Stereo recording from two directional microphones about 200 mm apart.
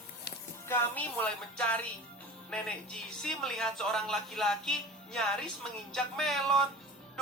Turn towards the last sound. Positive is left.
turn(degrees=0)  # may be behind; listen again after turning